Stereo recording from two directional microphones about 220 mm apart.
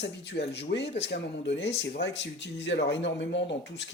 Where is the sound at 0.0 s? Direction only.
50° left (ahead or behind).